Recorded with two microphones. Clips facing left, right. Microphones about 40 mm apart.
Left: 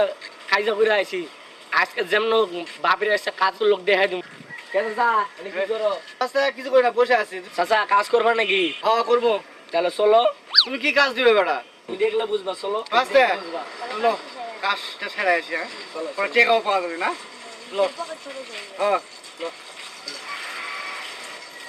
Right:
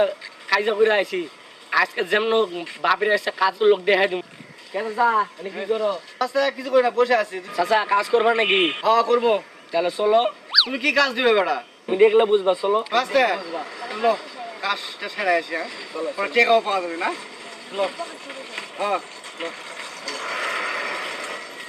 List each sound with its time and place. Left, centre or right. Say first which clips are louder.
0.0 s a man's voice: right 1 dB; centre
4.7 s speech: left 4 dB; centre
4.9 s a man's voice: right 4 dB; centre
11.9 s a man's voice: right 7 dB; right
12.9 s a man's voice: left 7 dB; centre
15.9 s speech: right 2 dB; centre
16.2 s a man's voice: even; centre
17.9 s a man's voice: left 1 dB; right
19.4 s speech: even; right
20.1 s mechanisms: right 7 dB; right